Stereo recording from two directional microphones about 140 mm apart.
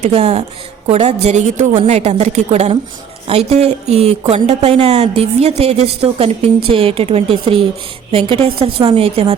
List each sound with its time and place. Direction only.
0.0 s a woman's voice: 50° right (ahead or behind)